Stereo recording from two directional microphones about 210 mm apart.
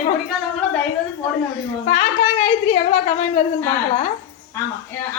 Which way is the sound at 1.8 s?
30° left (ahead or behind).